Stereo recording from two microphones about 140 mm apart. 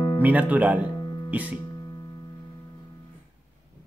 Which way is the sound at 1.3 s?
10° right (ahead or behind).